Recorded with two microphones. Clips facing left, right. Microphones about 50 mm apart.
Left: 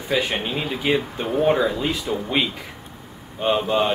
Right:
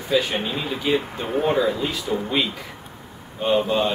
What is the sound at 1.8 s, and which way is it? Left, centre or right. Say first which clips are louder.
Speech: even; left.